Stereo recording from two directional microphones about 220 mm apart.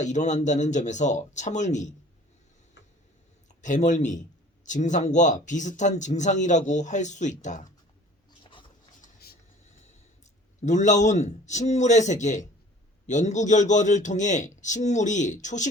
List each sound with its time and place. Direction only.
0.0 s speech: 30° left (ahead or behind)
3.6 s speech: 35° left (ahead or behind)
9.0 s a sound: 45° left (ahead or behind)
10.6 s speech: 35° left (ahead or behind)